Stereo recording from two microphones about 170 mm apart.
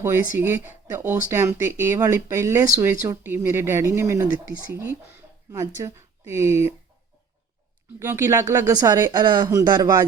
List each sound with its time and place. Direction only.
0.0 s speech: 15° right (ahead or behind)
7.9 s speech: 15° right (ahead or behind)